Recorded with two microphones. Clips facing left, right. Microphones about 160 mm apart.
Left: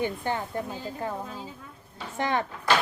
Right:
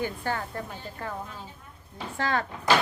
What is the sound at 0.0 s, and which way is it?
Speech, 20° left (ahead or behind).